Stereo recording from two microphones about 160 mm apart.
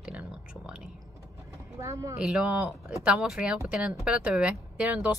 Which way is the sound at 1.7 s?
20° right (ahead or behind).